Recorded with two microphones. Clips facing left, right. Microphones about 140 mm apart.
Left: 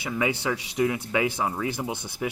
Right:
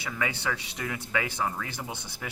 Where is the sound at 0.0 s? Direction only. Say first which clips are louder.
Left 5 dB; 15° left (ahead or behind).